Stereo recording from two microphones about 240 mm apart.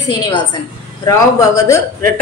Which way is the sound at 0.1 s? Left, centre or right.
Centre.